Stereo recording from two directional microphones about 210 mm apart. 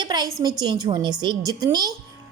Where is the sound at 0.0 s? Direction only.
20° right (ahead or behind).